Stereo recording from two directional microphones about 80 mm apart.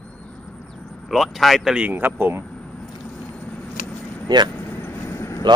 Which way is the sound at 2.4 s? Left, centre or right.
Centre.